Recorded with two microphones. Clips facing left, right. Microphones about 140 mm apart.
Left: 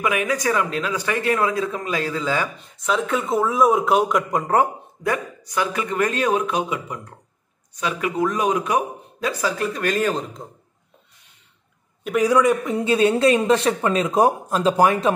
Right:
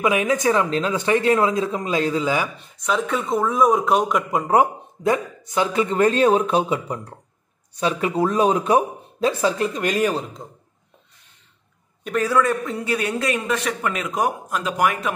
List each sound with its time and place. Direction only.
0.0 s speech: 20° right (ahead or behind)
2.8 s speech: centre (ahead or behind)
4.6 s speech: 20° right (ahead or behind)
12.0 s a man's voice: 10° left (ahead or behind); by 15.1 s 30° left (ahead or behind)